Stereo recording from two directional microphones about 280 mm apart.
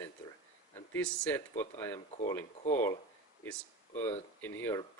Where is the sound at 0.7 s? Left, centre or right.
Centre.